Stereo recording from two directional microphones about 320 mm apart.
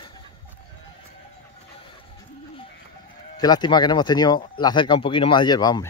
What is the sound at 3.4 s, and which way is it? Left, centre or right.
Speech, centre.